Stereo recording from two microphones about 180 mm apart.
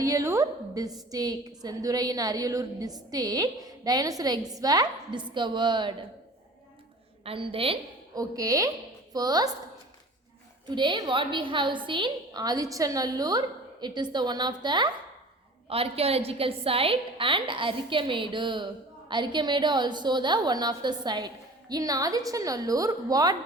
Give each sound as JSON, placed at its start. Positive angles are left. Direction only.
{"t": 0.0, "sound": "a woman's voice", "side_deg": -15}
{"t": 7.3, "sound": "a woman's voice", "side_deg": -30}
{"t": 8.1, "sound": "a woman's voice", "side_deg": -20}
{"t": 10.7, "sound": "a woman's voice", "side_deg": -25}